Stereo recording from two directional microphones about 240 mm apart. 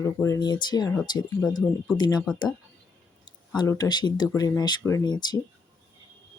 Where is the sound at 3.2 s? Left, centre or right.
Centre.